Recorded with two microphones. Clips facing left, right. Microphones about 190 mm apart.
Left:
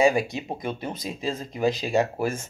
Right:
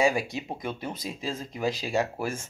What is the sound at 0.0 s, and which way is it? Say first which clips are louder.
Speech: left 4 dB; 20° left (ahead or behind).